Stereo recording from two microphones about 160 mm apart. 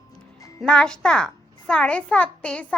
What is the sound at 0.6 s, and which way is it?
A child's voice, 5° left (ahead or behind).